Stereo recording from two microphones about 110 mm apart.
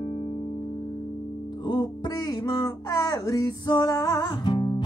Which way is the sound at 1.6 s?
40° left (ahead or behind).